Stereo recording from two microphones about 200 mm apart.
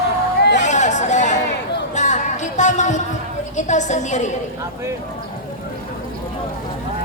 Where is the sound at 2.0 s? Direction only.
35° left (ahead or behind).